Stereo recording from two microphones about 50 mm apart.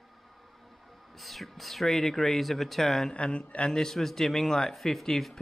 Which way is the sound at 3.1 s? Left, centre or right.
Left.